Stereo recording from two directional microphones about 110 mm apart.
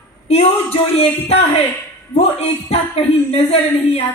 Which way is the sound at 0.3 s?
65° left (ahead or behind).